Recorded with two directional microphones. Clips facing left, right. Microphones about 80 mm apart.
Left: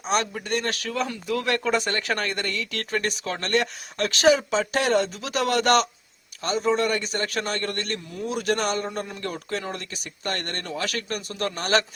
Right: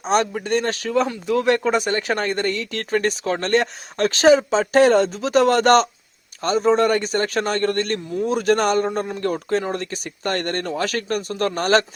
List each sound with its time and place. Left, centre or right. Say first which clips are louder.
0.0 s a man's voice: right 6 dB; right